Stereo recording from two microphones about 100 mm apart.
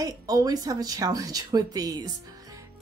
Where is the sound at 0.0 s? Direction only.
35° right (ahead or behind).